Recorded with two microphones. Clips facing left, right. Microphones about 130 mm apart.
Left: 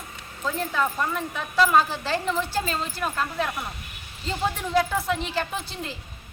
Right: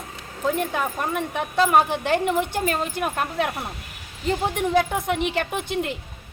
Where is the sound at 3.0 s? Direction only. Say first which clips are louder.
Right 3 dB; 65° right (ahead or behind).